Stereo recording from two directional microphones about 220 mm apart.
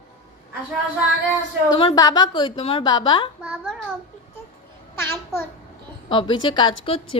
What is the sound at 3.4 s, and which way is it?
Speech, 5° right (ahead or behind).